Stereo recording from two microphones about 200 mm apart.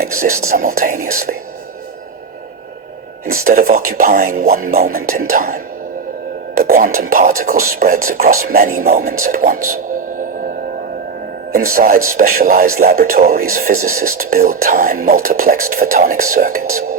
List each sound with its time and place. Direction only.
0.2 s speech: 45° right (ahead or behind)
3.4 s speech: 45° right (ahead or behind)
11.5 s speech: 45° right (ahead or behind)